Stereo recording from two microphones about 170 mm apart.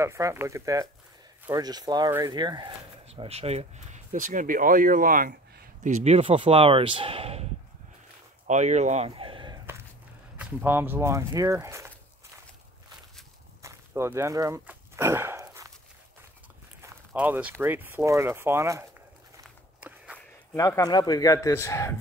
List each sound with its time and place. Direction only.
0.0 s speech: 15° right (ahead or behind)
3.1 s speech: 35° right (ahead or behind); by 5.3 s 55° right (ahead or behind)
5.9 s speech: 40° right (ahead or behind)
8.5 s speech: 45° right (ahead or behind)
10.3 s speech: 10° right (ahead or behind)
13.6 s a sound: 15° right (ahead or behind)
16.8 s speech: 10° right (ahead or behind)
19.4 s walk: 5° right (ahead or behind)
20.5 s speech: 20° left (ahead or behind)